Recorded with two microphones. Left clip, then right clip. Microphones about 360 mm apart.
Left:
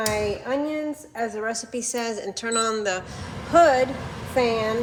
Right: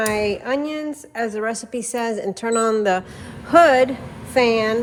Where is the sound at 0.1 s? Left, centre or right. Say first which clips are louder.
Right 4 dB; right.